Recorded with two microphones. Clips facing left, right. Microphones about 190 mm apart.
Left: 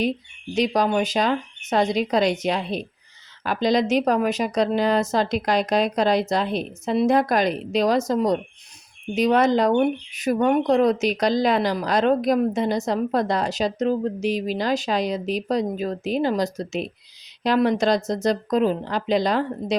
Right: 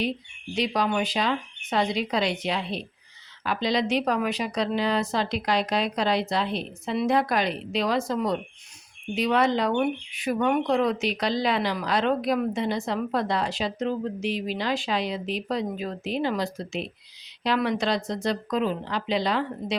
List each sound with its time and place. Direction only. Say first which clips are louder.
0.5 s a woman's voice: left 5 dB; 45° left (ahead or behind)